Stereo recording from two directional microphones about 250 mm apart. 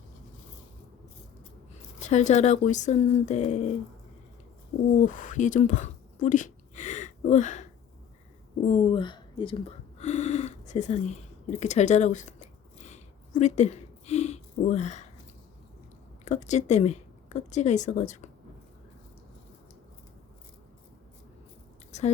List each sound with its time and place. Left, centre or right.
2.0 s speech: left
4.9 s speech: left
12.8 s a sound: left
16.2 s speech: left